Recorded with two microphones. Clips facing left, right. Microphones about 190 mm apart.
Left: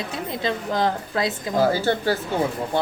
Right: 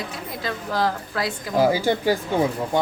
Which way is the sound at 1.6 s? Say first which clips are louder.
Right 1 dB; 10° right (ahead or behind).